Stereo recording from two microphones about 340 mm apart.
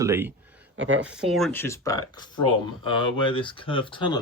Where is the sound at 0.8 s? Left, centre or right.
Right.